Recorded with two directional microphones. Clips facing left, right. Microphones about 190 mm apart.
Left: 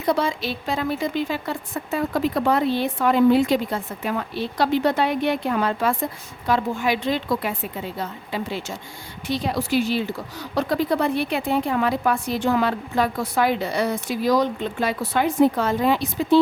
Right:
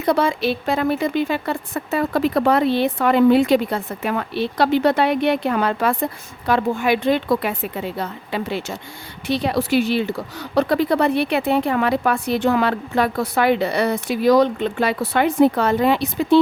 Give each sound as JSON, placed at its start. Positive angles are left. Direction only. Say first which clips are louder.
{"t": 0.0, "sound": "a woman's voice", "louder": "right 4 dB", "side_deg": -60}